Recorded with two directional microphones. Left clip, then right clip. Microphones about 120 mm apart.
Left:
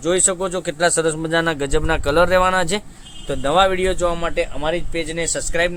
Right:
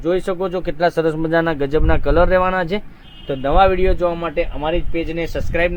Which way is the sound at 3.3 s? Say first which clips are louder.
Right 2 dB; 45° right (ahead or behind).